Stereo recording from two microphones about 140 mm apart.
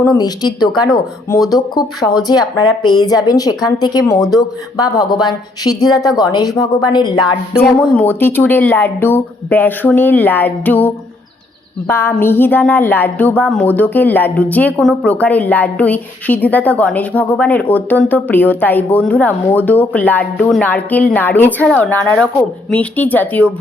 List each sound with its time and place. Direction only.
0.0 s a woman's voice: 25° left (ahead or behind)
7.5 s speech: 15° left (ahead or behind)